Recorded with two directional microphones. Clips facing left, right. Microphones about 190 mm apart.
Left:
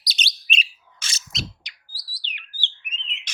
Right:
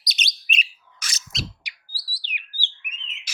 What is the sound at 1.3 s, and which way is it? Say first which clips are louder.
Bird: even; centre (ahead or behind).